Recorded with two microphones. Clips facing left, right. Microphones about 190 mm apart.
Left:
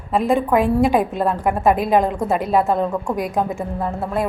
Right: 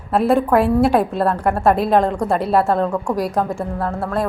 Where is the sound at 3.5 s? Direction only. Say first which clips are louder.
Right 1 dB; 15° left (ahead or behind).